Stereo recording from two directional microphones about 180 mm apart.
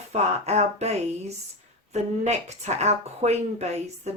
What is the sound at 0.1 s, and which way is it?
Speech, 35° right (ahead or behind).